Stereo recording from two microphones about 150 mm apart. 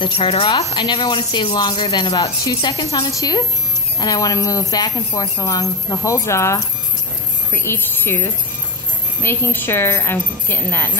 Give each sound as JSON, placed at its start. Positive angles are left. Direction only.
{"t": 0.0, "sound": "a woman's voice", "side_deg": 35}